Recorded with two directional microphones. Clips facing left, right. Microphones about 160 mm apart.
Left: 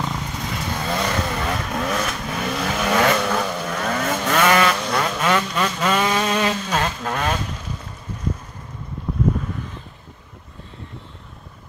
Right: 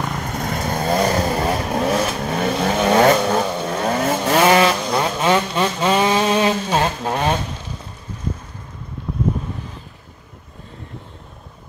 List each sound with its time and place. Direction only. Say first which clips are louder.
0.0 s vehicle: right 3 dB; 50° right (ahead or behind); by 7.3 s 35° right (ahead or behind)